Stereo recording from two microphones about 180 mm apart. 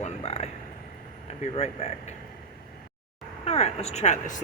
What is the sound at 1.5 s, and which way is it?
Speech, 35° left (ahead or behind).